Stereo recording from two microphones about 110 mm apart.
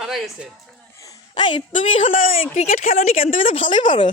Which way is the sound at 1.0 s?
35° left (ahead or behind).